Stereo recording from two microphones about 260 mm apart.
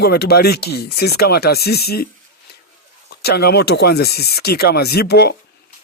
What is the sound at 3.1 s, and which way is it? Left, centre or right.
Speech, left.